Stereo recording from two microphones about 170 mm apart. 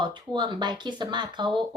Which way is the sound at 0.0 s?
25° right (ahead or behind).